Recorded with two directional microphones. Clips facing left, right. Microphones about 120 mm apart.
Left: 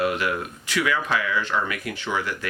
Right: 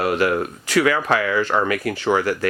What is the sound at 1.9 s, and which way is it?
Speech, 40° right (ahead or behind).